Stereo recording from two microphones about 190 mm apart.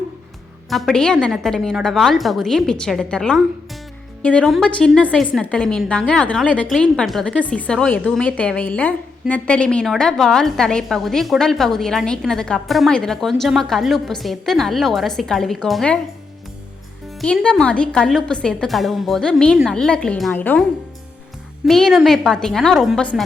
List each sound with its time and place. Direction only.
0.7 s a woman's voice: centre (ahead or behind)
17.2 s a woman's voice: 5° left (ahead or behind)
21.7 s a woman's voice: centre (ahead or behind)